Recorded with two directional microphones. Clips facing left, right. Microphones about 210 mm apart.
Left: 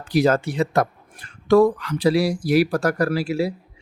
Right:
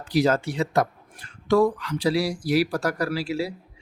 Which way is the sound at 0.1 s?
55° left (ahead or behind).